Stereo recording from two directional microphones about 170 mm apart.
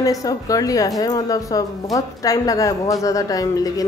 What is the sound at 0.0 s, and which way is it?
A woman's voice, 20° left (ahead or behind).